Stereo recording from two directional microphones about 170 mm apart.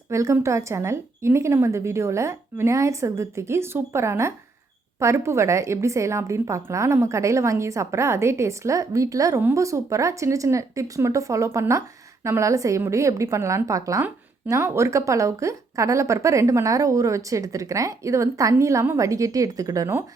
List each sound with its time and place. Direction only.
0.1 s a woman's voice: 15° right (ahead or behind)